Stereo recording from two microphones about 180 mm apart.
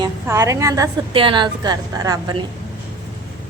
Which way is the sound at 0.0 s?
15° right (ahead or behind).